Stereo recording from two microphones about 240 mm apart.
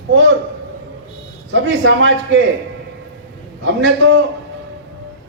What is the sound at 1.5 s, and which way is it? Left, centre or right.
Speech, right.